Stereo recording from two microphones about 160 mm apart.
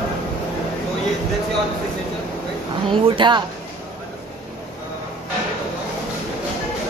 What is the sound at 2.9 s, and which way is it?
Speech, 30° right (ahead or behind).